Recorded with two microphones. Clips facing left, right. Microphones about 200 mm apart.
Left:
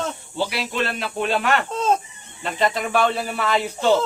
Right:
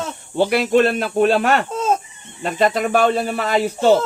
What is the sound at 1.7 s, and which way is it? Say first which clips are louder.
Fowl: right 1 dB; 5° right (ahead or behind).